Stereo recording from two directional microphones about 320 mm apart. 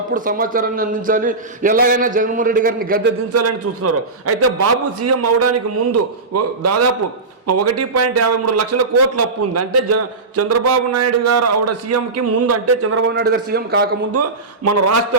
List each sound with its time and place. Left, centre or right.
0.1 s a man's voice: right
3.3 s a man's voice: right
13.1 s a man's voice: right
14.1 s a man's voice: right